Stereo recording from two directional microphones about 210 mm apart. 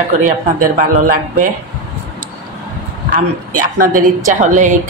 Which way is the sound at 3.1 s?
40° right (ahead or behind).